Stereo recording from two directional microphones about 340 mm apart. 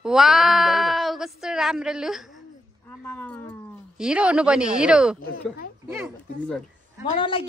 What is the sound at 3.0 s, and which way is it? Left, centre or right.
Cat, centre.